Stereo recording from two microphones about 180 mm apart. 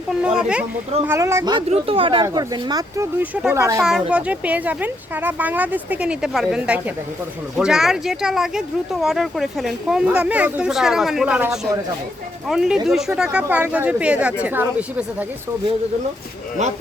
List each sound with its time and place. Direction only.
0.2 s speech: 5° right (ahead or behind)
1.7 s speech: 30° right (ahead or behind)
2.2 s speech: 20° right (ahead or behind)
3.8 s speech: centre (ahead or behind)